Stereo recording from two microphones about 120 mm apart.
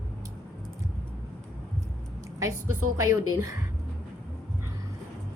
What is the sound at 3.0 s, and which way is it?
Speech, 25° right (ahead or behind).